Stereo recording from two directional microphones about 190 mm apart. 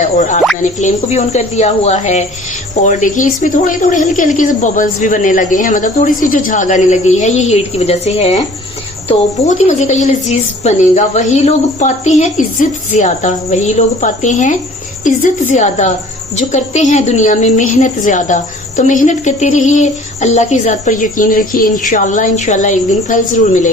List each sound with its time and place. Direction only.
0.0 s a woman's voice: 40° left (ahead or behind)
9.6 s a woman's voice: 40° left (ahead or behind)